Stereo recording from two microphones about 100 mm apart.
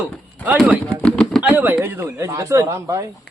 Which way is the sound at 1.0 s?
10° left (ahead or behind).